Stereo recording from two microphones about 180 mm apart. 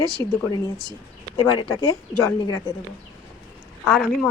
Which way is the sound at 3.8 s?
5° left (ahead or behind).